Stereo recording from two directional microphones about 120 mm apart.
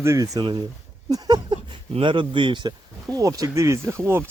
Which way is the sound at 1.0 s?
35° right (ahead or behind).